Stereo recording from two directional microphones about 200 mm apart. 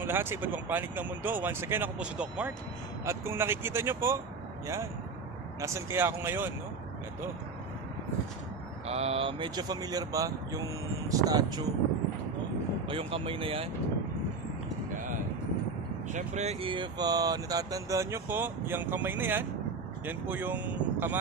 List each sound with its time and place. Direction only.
0.0 s speech: 10° right (ahead or behind)
5.6 s speech: 15° right (ahead or behind)
8.8 s speech: 30° right (ahead or behind)
12.8 s speech: 25° right (ahead or behind)
16.1 s speech: 35° right (ahead or behind); by 21.2 s 10° right (ahead or behind)